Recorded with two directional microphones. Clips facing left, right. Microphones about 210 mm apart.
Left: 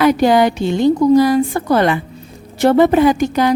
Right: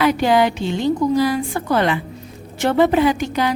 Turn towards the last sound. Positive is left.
turn(degrees=45)  # may be behind; listen again after turning